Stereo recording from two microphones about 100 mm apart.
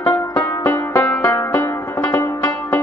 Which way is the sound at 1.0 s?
25° left (ahead or behind).